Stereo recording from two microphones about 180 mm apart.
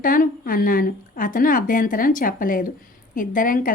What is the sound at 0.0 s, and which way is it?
A woman's voice, 50° left (ahead or behind).